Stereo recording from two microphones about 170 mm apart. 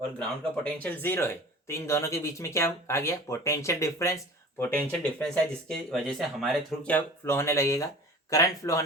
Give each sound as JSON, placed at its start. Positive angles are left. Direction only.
{"t": 0.2, "sound": "speech", "side_deg": 5}